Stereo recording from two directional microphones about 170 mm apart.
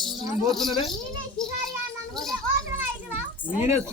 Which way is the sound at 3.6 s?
15° right (ahead or behind).